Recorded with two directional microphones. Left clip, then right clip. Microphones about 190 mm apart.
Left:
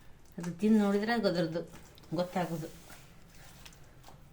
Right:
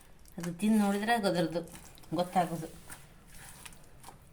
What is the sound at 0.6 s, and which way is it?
Speech, 50° right (ahead or behind).